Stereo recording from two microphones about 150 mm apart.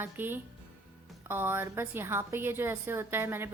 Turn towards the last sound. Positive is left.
turn(degrees=-15)  # may be behind; listen again after turning